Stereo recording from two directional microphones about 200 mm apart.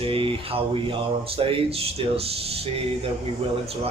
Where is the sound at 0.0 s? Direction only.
25° right (ahead or behind).